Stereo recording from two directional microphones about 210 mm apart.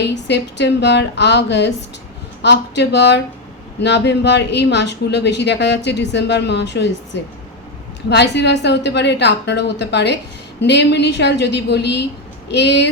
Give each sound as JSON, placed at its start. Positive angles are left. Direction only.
{"t": 0.0, "sound": "speech", "side_deg": 55}